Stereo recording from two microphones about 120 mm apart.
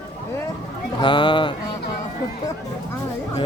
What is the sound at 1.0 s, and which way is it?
Speech, 40° left (ahead or behind).